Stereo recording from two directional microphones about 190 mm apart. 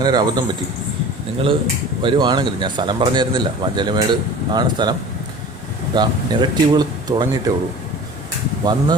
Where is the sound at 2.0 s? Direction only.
25° right (ahead or behind).